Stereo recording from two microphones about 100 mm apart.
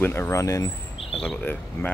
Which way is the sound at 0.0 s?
25° left (ahead or behind).